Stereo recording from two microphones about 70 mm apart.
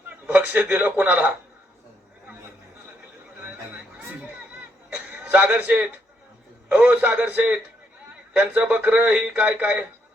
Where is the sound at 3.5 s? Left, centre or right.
Right.